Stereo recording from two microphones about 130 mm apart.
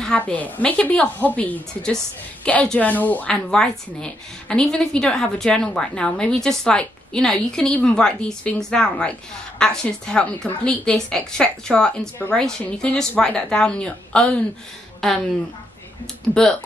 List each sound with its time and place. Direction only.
0.0 s a woman's voice: 10° left (ahead or behind)